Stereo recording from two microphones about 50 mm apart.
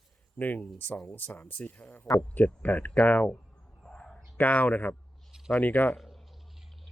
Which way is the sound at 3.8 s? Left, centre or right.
Centre.